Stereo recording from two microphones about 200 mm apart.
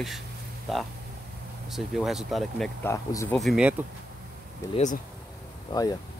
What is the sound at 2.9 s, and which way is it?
Speech, 15° left (ahead or behind).